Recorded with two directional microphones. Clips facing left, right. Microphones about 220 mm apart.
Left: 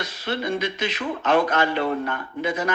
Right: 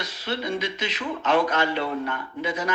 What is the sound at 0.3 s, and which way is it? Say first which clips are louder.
A man's voice: left 2 dB; 55° left (ahead or behind).